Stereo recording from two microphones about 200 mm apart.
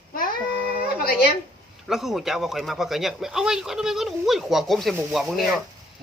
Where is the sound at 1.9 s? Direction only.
Centre (ahead or behind).